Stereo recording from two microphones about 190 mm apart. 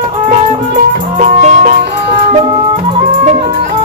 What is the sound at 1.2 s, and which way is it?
Music, 35° right (ahead or behind).